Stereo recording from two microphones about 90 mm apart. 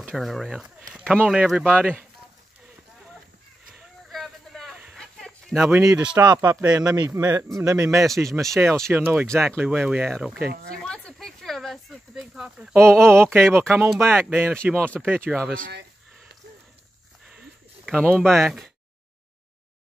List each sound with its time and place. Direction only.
0.0 s speech: centre (ahead or behind); by 2.0 s 20° right (ahead or behind)
4.1 s a sound: 5° left (ahead or behind)
5.7 s a man's voice: 35° right (ahead or behind)
8.6 s speech: 15° right (ahead or behind)
9.3 s speech: 5° left (ahead or behind)
9.6 s speech: 20° right (ahead or behind)
10.0 s speech: centre (ahead or behind)
10.9 s a sound: 5° left (ahead or behind)
12.7 s speech: 5° left (ahead or behind)
13.1 s speech: 25° right (ahead or behind)
17.2 s a sound: 10° right (ahead or behind)
17.8 s speech: 5° left (ahead or behind)